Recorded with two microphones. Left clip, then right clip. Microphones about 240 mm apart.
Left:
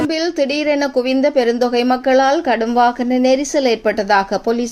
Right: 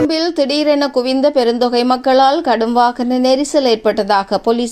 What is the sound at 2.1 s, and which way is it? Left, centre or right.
Speech, right.